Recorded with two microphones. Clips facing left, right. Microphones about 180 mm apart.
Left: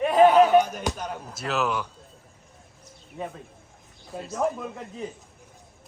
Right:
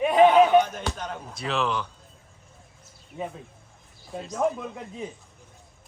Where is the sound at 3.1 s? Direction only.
5° left (ahead or behind).